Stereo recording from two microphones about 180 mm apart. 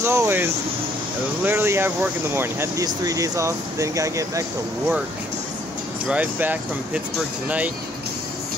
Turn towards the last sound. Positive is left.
turn(degrees=-10)  # may be behind; listen again after turning